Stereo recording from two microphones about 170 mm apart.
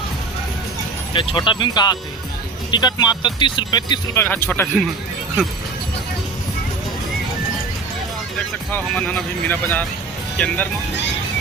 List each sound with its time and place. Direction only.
1.1 s speech: 30° left (ahead or behind)
4.2 s speech: 10° left (ahead or behind)
8.7 s speech: 10° left (ahead or behind)